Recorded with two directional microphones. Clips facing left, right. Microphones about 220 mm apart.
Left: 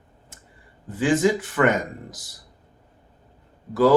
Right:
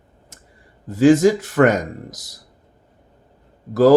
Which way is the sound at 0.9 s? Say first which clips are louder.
Right 7 dB; 40° right (ahead or behind).